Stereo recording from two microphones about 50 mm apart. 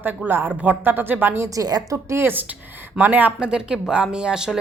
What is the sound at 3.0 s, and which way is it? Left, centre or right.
Speech, right.